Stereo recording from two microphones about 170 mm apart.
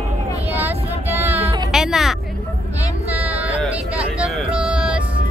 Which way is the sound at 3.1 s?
10° right (ahead or behind).